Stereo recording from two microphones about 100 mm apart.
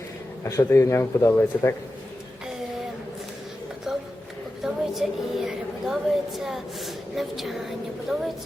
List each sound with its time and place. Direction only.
0.4 s speech: 35° left (ahead or behind)
4.6 s a sound: 5° right (ahead or behind)
8.1 s a woman's voice: centre (ahead or behind)